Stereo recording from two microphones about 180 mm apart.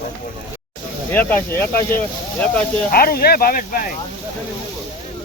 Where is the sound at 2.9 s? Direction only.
55° left (ahead or behind).